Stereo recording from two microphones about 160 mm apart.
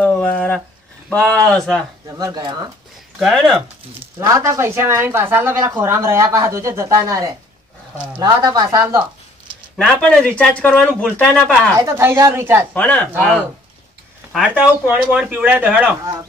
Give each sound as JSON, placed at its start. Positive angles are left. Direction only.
{"t": 0.0, "sound": "a sound", "side_deg": 10}
{"t": 1.1, "sound": "speech", "side_deg": 5}
{"t": 2.0, "sound": "speech", "side_deg": -20}
{"t": 3.2, "sound": "speech", "side_deg": 0}
{"t": 4.2, "sound": "speech", "side_deg": -20}
{"t": 9.8, "sound": "speech", "side_deg": 5}
{"t": 11.7, "sound": "speech", "side_deg": -20}
{"t": 12.7, "sound": "speech", "side_deg": 10}
{"t": 14.3, "sound": "speech", "side_deg": -10}